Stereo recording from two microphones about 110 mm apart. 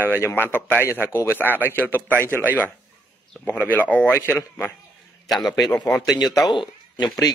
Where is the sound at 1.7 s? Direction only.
20° left (ahead or behind).